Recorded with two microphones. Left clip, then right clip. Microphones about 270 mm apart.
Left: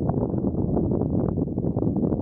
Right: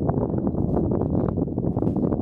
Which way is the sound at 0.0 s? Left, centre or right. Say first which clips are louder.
Right 1 dB; centre.